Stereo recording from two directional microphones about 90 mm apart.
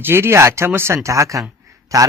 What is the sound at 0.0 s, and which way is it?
Speech, 30° right (ahead or behind).